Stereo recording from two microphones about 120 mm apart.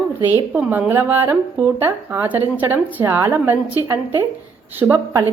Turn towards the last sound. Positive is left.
turn(degrees=-20)  # may be behind; listen again after turning